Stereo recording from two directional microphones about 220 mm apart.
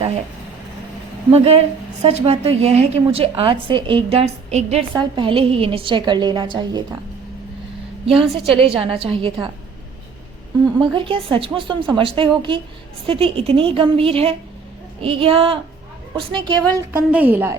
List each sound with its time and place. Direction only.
1.3 s a woman's voice: 30° right (ahead or behind)
8.0 s a woman's voice: 25° right (ahead or behind)
10.8 s a woman's voice: 25° right (ahead or behind)
16.9 s a woman's voice: 5° right (ahead or behind)